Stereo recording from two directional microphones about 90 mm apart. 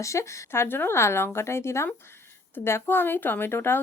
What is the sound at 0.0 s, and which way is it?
A woman's voice, 35° left (ahead or behind).